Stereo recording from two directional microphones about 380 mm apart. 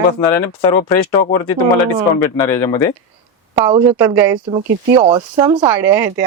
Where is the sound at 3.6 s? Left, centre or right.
Centre.